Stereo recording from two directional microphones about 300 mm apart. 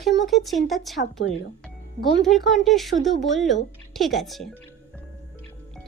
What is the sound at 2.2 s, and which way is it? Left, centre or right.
Speech, centre.